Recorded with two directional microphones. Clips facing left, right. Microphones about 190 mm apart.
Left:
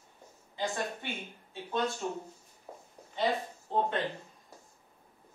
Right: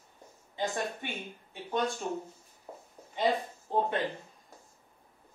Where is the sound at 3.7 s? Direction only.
15° right (ahead or behind).